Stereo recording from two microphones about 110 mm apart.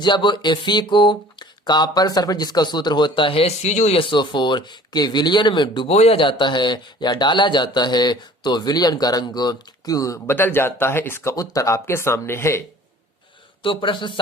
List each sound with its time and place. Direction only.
0.0 s speech: 45° left (ahead or behind); by 4.0 s 90° left
4.0 s speech: 45° left (ahead or behind)
5.9 s speech: 65° left (ahead or behind); by 10.3 s 30° left (ahead or behind)
10.3 s speech: 20° left (ahead or behind)
13.6 s speech: 50° left (ahead or behind)